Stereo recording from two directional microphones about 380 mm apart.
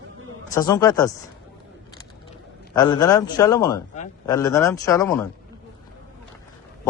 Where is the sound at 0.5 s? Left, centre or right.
Centre.